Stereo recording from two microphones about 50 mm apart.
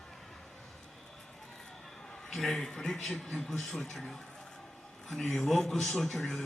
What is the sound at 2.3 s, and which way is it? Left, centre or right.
A man's voice, centre.